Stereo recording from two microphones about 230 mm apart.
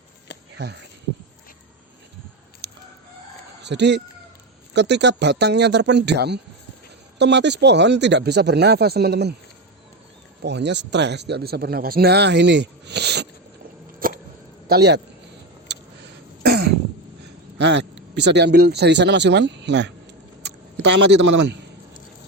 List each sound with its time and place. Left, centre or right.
0.5 s speech: right
2.6 s crowing: right
3.6 s a man's voice: right
10.4 s a man's voice: right
14.0 s a sound: right
14.7 s a man's voice: right
15.7 s a sound: right
16.4 s cough: right
17.7 s a man's voice: right
20.4 s a sound: right